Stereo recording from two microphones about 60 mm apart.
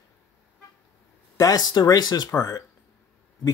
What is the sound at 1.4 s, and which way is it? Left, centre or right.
Speech, left.